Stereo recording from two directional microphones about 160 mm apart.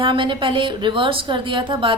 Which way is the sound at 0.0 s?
30° right (ahead or behind).